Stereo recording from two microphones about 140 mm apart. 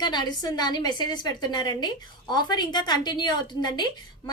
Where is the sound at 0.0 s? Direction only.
30° left (ahead or behind).